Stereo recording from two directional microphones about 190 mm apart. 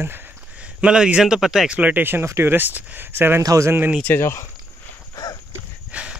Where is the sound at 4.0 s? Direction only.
15° left (ahead or behind).